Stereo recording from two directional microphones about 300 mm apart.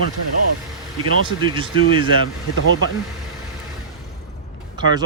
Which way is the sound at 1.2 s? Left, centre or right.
Centre.